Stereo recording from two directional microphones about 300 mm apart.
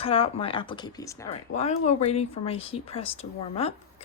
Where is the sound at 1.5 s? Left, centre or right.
Left.